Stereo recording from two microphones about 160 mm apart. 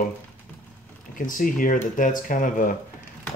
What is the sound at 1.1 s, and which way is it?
Speech, 55° left (ahead or behind).